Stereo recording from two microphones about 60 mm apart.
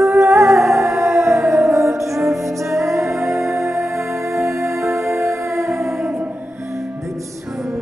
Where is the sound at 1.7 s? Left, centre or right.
Right.